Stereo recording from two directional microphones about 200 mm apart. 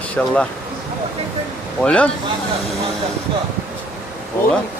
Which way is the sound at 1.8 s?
5° left (ahead or behind).